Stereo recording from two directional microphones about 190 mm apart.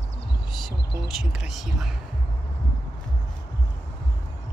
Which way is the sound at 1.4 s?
Centre (ahead or behind).